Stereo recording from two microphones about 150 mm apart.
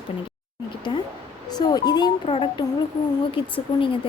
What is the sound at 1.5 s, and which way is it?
Speech, 25° left (ahead or behind).